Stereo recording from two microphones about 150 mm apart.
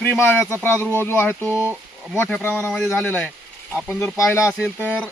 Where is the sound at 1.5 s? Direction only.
15° right (ahead or behind).